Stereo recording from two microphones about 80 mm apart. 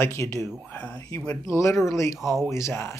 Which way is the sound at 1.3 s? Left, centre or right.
Left.